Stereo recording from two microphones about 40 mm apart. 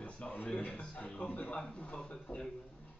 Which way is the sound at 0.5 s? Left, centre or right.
Left.